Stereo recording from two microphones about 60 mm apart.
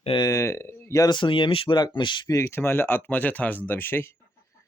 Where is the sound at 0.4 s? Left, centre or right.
Left.